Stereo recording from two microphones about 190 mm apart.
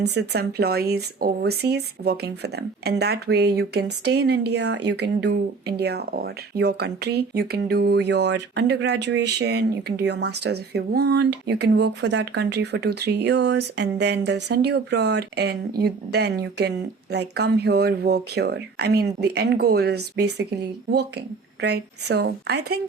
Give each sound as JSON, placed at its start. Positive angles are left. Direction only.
{"t": 0.0, "sound": "speech", "side_deg": -60}